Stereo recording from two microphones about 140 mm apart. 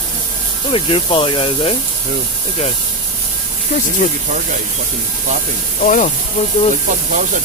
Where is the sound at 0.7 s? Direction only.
40° left (ahead or behind).